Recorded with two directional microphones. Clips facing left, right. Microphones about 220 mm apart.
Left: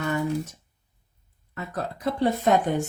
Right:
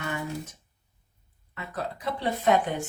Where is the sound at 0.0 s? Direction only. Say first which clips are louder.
Left 7 dB; 40° left (ahead or behind).